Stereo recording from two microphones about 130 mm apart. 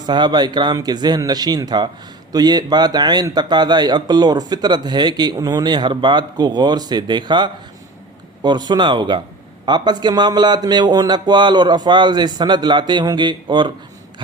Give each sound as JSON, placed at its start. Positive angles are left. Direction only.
{"t": 0.0, "sound": "a man's voice", "side_deg": -35}